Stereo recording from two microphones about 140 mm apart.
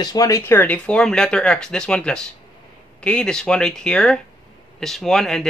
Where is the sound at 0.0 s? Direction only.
25° left (ahead or behind).